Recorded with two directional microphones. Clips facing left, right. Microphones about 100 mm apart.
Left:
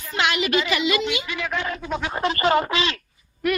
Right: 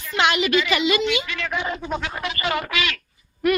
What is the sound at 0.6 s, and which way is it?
Speech, centre (ahead or behind).